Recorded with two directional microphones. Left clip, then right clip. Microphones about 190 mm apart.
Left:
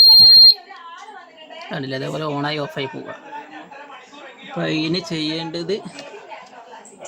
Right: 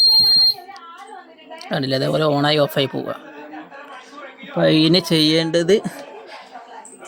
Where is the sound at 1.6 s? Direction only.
25° right (ahead or behind).